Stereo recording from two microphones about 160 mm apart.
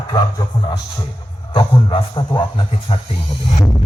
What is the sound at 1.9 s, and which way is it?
A man's voice, 30° left (ahead or behind).